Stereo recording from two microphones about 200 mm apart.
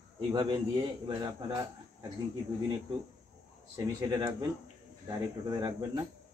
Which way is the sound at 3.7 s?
15° right (ahead or behind).